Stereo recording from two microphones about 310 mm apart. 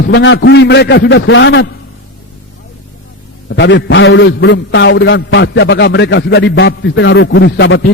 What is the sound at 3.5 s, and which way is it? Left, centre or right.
A man's voice, left.